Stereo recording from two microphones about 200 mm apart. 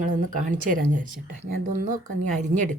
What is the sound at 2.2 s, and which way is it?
Speech, 40° right (ahead or behind).